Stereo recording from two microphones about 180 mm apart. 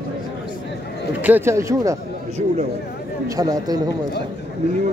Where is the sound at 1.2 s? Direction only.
10° right (ahead or behind).